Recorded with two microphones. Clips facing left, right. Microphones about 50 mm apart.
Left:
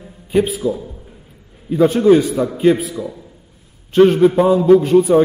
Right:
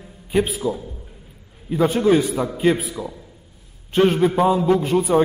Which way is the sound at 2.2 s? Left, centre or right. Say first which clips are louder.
Left 4 dB; right.